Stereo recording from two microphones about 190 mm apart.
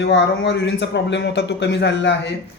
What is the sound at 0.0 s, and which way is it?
A man's voice, 65° left (ahead or behind).